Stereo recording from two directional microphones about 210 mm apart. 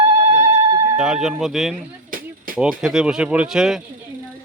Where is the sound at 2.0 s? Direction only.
40° right (ahead or behind).